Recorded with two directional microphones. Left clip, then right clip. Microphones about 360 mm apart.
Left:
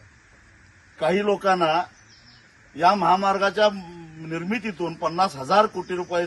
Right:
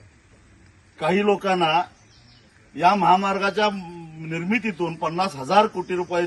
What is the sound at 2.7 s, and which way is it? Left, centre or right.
A man's voice, centre.